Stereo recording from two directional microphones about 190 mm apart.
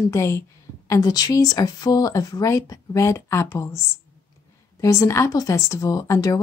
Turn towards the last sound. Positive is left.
turn(degrees=20)  # may be behind; listen again after turning